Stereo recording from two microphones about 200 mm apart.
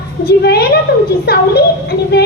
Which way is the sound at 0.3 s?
50° left (ahead or behind).